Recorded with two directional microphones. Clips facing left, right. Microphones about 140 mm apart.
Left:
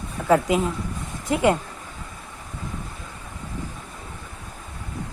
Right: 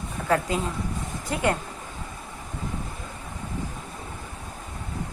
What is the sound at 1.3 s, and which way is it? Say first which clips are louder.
Speech: left 5 dB; 20° left (ahead or behind).